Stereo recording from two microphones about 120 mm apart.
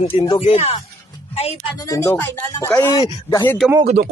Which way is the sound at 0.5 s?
65° left (ahead or behind).